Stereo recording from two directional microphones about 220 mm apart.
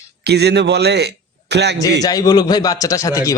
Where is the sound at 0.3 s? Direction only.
50° right (ahead or behind).